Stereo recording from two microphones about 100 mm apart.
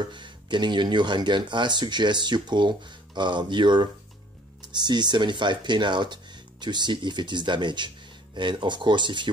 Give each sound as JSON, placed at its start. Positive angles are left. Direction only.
{"t": 0.0, "sound": "speech", "side_deg": -50}